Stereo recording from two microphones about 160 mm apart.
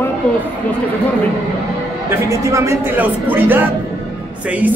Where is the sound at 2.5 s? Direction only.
20° right (ahead or behind).